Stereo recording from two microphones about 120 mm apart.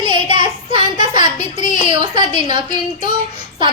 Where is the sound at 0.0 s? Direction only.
40° right (ahead or behind).